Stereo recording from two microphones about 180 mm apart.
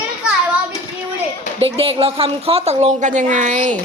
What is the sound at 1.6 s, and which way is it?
A woman's voice, 30° right (ahead or behind).